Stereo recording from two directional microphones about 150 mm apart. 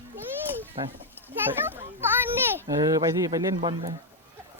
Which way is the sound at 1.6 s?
15° right (ahead or behind).